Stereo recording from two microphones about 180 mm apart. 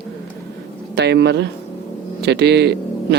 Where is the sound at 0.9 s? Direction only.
70° right (ahead or behind).